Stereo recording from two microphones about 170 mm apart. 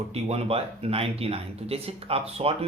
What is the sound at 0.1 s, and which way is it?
Speech, 35° right (ahead or behind).